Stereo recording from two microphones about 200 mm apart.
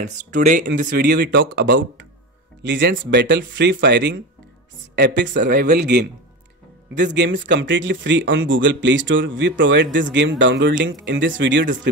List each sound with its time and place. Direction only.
0.1 s speech: 40° right (ahead or behind)
0.8 s speech: 50° right (ahead or behind)